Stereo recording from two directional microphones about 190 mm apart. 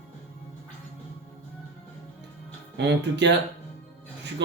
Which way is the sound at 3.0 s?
65° right (ahead or behind).